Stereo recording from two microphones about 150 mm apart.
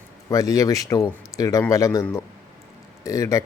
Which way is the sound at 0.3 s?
20° left (ahead or behind).